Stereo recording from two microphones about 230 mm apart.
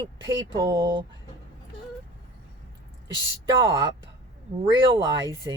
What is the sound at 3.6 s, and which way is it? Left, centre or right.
Speech, right.